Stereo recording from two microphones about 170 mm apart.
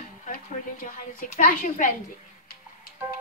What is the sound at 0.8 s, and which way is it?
A woman's voice, 55° left (ahead or behind).